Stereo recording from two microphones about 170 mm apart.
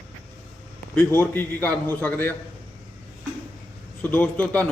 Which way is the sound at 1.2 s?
10° left (ahead or behind).